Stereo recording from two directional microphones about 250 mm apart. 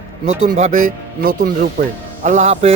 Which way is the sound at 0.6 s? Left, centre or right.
Right.